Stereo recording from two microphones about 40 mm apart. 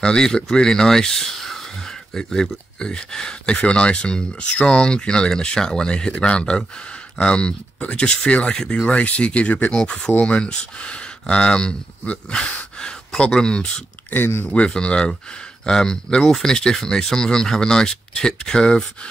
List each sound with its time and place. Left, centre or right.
0.0 s speech: left
12.3 s a sound: centre
13.3 s speech: centre
14.1 s speech: left
14.5 s speech: left